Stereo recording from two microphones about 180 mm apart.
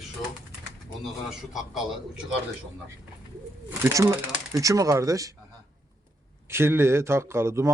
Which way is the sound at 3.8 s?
15° right (ahead or behind).